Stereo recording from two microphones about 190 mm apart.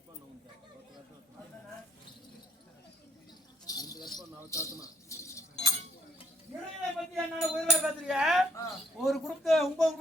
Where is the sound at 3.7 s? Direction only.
20° left (ahead or behind).